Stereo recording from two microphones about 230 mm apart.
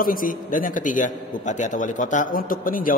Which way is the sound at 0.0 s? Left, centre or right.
Left.